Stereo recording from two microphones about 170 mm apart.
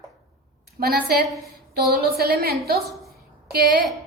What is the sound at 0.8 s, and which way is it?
A woman's voice, 65° right (ahead or behind).